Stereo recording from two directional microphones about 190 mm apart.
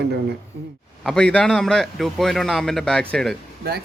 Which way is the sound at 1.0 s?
5° left (ahead or behind).